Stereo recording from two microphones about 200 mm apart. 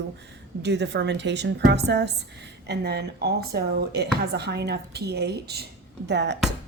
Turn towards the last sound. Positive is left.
turn(degrees=-60)  # may be behind; listen again after turning